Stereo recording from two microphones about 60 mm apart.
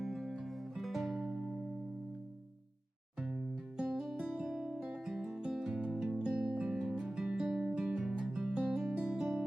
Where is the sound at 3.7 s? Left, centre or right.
Centre.